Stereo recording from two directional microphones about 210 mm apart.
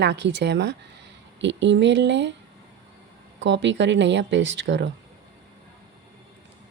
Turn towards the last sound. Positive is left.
turn(degrees=-60)  # may be behind; listen again after turning